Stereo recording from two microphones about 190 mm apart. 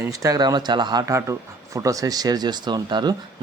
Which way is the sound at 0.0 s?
15° right (ahead or behind).